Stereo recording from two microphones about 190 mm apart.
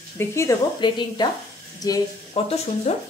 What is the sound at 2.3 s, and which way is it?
Speech, 30° left (ahead or behind).